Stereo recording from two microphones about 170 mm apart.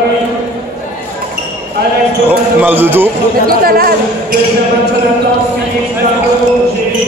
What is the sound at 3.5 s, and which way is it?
Speech, 60° right (ahead or behind).